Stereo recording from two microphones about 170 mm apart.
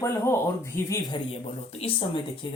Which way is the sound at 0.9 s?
25° left (ahead or behind).